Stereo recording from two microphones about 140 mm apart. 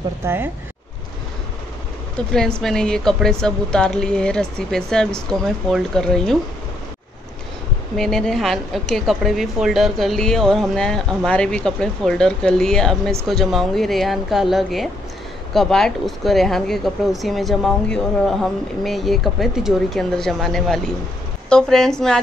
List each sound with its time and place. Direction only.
0.2 s speech: 15° right (ahead or behind)
2.1 s speech: 5° left (ahead or behind)
7.9 s speech: centre (ahead or behind)